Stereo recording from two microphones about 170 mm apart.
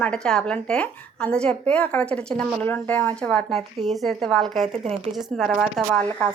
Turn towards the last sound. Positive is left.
turn(degrees=5)  # may be behind; listen again after turning